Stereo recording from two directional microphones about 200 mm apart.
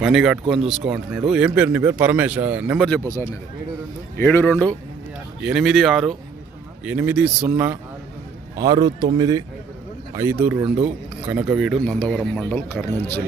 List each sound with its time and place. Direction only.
0.0 s speech: centre (ahead or behind)
4.2 s a man's voice: 10° left (ahead or behind)
5.4 s a man's voice: centre (ahead or behind)